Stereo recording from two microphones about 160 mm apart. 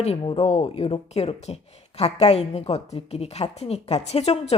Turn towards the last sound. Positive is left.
turn(degrees=40)  # may be behind; listen again after turning